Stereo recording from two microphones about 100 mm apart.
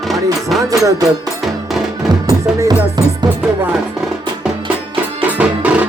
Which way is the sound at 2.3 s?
40° right (ahead or behind).